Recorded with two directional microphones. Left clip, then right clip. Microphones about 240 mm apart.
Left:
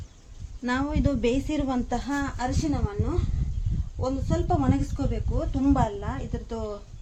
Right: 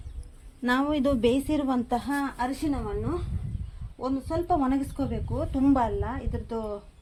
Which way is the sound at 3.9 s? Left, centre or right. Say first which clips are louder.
Even; centre.